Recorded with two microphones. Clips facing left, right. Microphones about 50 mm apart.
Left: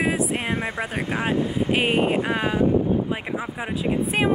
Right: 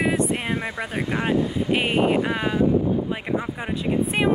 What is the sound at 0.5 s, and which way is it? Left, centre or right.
Speech, left.